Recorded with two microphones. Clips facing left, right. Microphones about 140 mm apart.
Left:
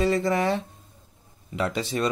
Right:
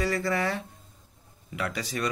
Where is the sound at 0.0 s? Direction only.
20° left (ahead or behind).